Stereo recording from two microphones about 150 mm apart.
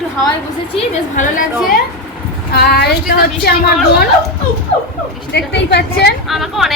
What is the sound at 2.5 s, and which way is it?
Speech, 90° left.